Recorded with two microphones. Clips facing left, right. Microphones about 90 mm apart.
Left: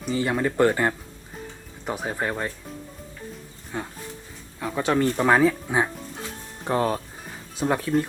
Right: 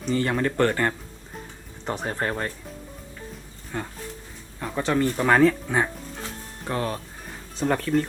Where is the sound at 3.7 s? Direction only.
10° left (ahead or behind).